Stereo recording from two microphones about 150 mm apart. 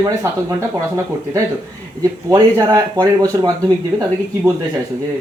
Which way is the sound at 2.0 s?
25° right (ahead or behind).